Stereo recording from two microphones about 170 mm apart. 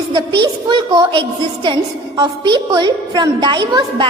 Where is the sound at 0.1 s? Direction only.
25° right (ahead or behind).